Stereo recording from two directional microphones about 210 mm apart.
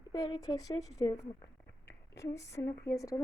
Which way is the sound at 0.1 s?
20° left (ahead or behind).